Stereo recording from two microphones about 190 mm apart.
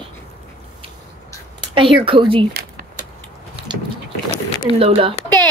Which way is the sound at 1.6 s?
25° right (ahead or behind).